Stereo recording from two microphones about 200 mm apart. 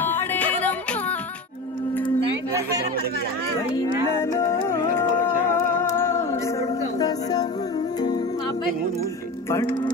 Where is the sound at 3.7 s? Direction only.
15° left (ahead or behind).